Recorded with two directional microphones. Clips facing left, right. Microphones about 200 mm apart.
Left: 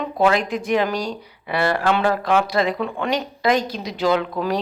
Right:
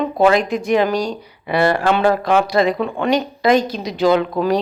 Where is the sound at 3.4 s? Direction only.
10° left (ahead or behind).